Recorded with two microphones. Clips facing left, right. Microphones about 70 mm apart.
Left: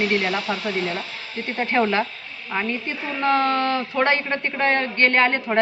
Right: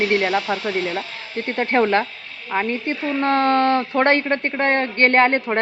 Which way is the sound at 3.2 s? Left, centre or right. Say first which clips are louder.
Right 2 dB; right.